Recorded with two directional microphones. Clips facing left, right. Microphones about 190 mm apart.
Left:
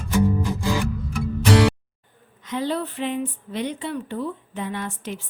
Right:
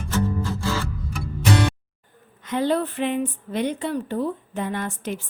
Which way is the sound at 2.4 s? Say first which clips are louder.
Right 3 dB; 55° right (ahead or behind).